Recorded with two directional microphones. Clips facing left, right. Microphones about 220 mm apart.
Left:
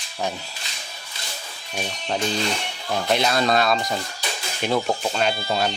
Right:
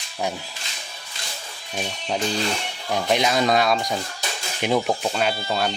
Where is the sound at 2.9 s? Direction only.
15° right (ahead or behind).